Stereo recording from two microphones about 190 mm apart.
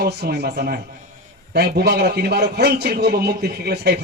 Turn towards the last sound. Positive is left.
turn(degrees=-60)  # may be behind; listen again after turning